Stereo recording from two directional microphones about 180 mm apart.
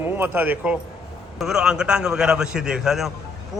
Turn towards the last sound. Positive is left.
turn(degrees=0)  # may be behind; listen again after turning